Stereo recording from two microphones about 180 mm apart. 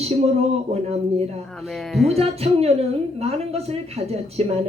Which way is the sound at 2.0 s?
35° right (ahead or behind).